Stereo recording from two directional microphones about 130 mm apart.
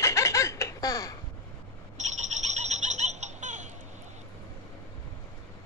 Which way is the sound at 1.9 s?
65° right (ahead or behind).